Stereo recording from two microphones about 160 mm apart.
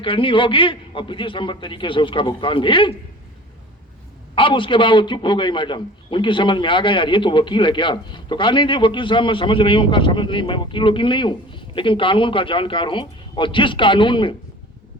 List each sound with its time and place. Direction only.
0.0 s a man's voice: 35° left (ahead or behind)
4.4 s a man's voice: 30° left (ahead or behind)